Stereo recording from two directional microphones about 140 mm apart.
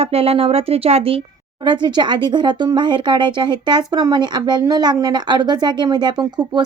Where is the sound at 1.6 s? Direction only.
30° right (ahead or behind).